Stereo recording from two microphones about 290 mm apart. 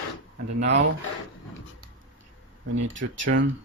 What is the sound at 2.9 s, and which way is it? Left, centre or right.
Speech, right.